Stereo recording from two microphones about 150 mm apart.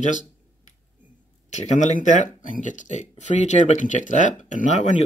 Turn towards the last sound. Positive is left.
turn(degrees=55)  # may be behind; listen again after turning